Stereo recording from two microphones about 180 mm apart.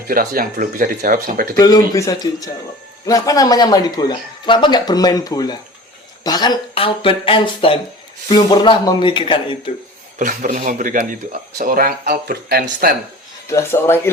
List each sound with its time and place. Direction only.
0.1 s speech: 50° right (ahead or behind)
1.5 s speech: 20° left (ahead or behind)
10.2 s speech: 50° right (ahead or behind)
13.5 s speech: 15° left (ahead or behind)